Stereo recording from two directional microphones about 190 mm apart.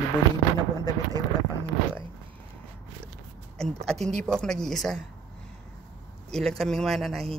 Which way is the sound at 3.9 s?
5° left (ahead or behind).